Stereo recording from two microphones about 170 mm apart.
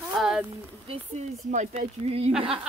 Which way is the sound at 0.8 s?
30° right (ahead or behind).